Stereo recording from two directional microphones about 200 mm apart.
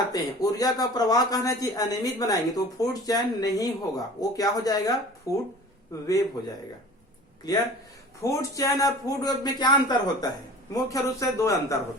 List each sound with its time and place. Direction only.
0.1 s a man's voice: 20° left (ahead or behind)
8.2 s a man's voice: 15° left (ahead or behind)